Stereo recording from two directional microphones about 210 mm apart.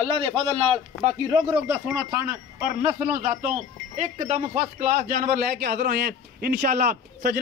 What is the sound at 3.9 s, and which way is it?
A man's voice, 35° right (ahead or behind).